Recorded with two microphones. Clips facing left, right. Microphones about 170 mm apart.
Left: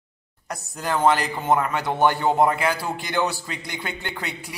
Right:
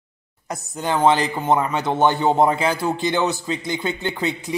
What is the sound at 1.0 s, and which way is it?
Speech, 25° right (ahead or behind).